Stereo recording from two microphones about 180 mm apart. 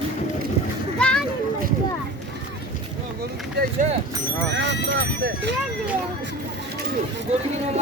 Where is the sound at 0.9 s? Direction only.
5° left (ahead or behind).